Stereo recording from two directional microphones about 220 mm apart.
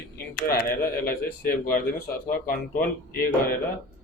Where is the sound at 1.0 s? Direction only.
40° left (ahead or behind).